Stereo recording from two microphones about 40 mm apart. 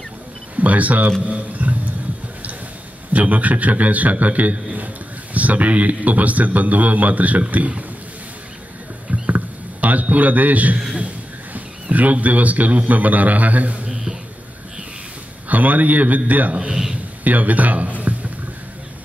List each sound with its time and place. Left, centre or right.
0.6 s speech: right
1.2 s a sound: right
3.1 s a man's voice: right
9.3 s a sound: right
11.5 s a man's voice: right
13.8 s a sound: centre
15.4 s a man's voice: right
16.5 s a man's voice: centre
17.2 s a man's voice: right